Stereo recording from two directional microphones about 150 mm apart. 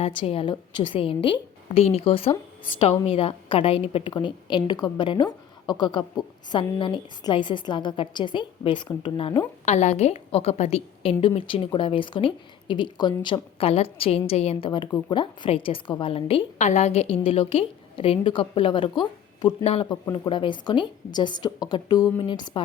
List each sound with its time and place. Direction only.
0.2 s speech: 35° left (ahead or behind)
9.6 s a woman's voice: 50° left (ahead or behind); by 19.5 s 30° left (ahead or behind)
19.6 s speech: 40° left (ahead or behind)